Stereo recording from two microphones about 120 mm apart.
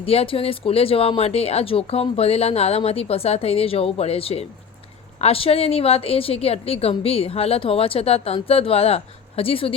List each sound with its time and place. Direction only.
0.0 s a woman's voice: 55° left (ahead or behind)